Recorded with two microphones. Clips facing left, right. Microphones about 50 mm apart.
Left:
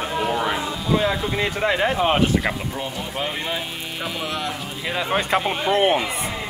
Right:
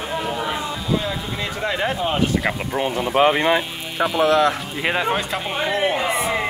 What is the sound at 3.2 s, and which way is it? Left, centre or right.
Speech, right.